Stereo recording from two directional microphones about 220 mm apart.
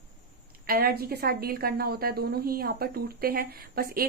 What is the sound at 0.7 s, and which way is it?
A woman's voice, 45° right (ahead or behind).